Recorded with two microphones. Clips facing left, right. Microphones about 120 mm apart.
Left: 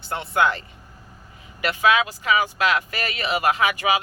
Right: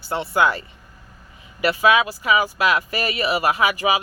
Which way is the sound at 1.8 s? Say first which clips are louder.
Right 1 dB; 10° right (ahead or behind).